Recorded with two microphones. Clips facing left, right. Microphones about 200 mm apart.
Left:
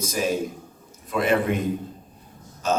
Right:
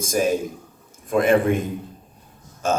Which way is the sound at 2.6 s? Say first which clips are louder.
Right 1 dB; 50° right (ahead or behind).